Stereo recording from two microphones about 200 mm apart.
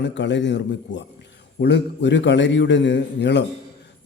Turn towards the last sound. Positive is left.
turn(degrees=60)  # may be behind; listen again after turning